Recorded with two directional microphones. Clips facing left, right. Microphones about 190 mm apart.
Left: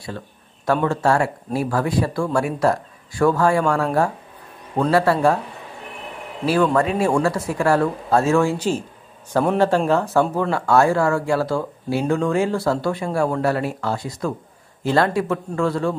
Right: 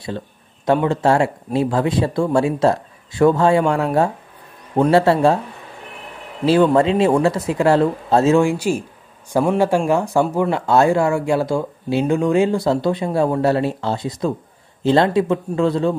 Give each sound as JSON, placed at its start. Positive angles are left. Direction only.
{"t": 0.7, "sound": "speech", "side_deg": -20}
{"t": 6.4, "sound": "a man's voice", "side_deg": -25}